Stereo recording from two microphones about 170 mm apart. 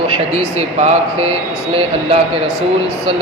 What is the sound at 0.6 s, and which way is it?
Speech, 40° right (ahead or behind).